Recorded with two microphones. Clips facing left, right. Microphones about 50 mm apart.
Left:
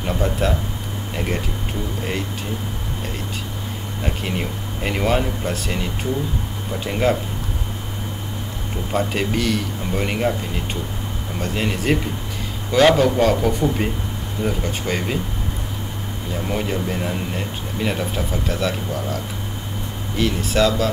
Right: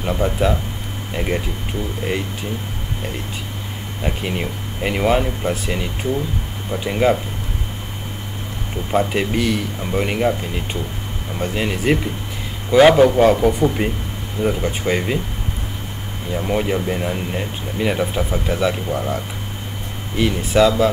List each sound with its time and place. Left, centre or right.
0.0 s a man's voice: centre
4.0 s a man's voice: centre
8.9 s a man's voice: centre
16.3 s a man's voice: centre